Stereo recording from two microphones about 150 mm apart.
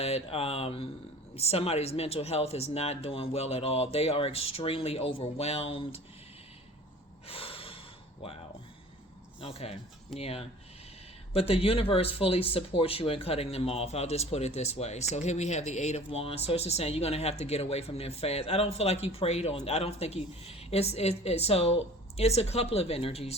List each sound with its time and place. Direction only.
0.0 s speech: 40° left (ahead or behind)
7.3 s snort: 40° left (ahead or behind)
9.4 s speech: 40° left (ahead or behind)